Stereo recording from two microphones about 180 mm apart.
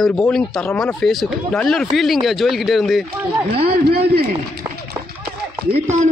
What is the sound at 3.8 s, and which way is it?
Speech, 60° right (ahead or behind).